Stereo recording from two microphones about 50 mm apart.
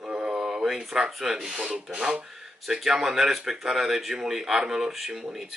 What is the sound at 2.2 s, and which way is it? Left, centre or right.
Speech, centre.